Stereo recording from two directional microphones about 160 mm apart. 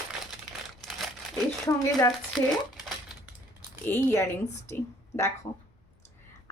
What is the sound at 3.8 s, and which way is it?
Speech, 10° left (ahead or behind).